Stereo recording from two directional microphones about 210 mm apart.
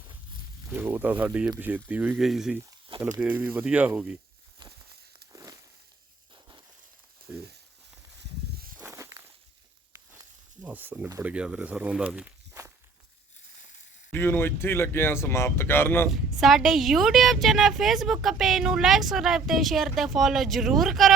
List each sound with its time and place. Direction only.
0.7 s speech: 10° right (ahead or behind)
5.3 s a sound: 15° right (ahead or behind)
7.3 s speech: 5° right (ahead or behind)
8.2 s a sound: 45° right (ahead or behind)
8.8 s walk: 15° right (ahead or behind)
9.9 s speech: 10° right (ahead or behind)
14.1 s speech: 10° left (ahead or behind)
16.0 s a woman's voice: centre (ahead or behind)